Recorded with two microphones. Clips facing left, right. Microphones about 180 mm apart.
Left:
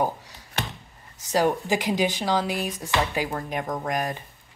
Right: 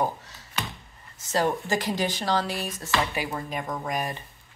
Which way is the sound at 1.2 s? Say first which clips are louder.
Left 3 dB; 10° left (ahead or behind).